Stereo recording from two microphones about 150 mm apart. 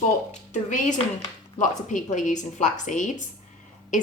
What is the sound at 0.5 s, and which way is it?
A woman's voice, 55° left (ahead or behind).